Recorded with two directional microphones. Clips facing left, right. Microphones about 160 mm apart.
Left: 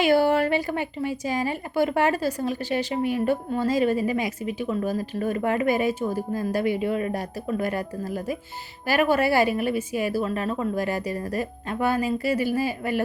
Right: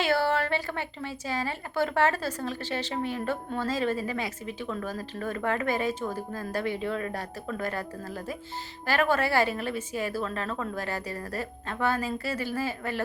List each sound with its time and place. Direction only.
0.0 s a woman's voice: 15° left (ahead or behind)